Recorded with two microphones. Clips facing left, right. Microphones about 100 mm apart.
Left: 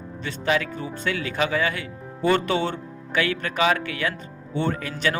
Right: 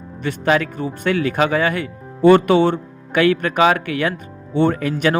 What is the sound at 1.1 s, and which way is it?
Speech, 45° right (ahead or behind).